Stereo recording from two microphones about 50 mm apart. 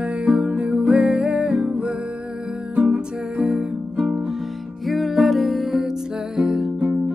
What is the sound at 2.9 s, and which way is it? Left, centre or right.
Music, centre.